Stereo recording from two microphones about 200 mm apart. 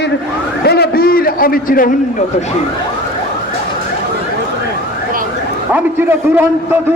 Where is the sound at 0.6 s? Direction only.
55° left (ahead or behind).